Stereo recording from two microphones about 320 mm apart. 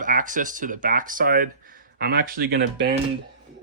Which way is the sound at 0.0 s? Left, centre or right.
Right.